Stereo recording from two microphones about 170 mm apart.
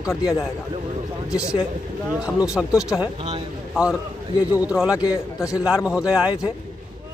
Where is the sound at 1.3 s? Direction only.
5° right (ahead or behind).